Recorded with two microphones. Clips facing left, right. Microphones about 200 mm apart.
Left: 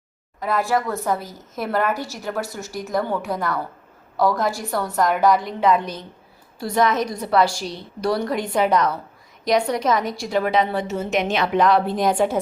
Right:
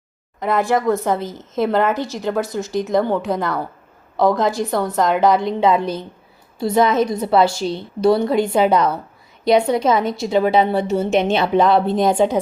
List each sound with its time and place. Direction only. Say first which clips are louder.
1.1 s a woman's voice: right 5 dB; 25° right (ahead or behind)